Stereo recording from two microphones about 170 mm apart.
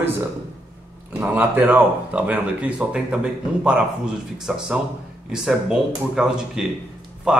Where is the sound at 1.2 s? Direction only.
10° right (ahead or behind).